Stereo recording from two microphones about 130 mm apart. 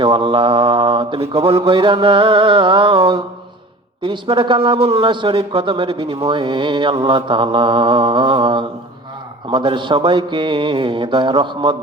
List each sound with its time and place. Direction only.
0.0 s speech: 40° right (ahead or behind)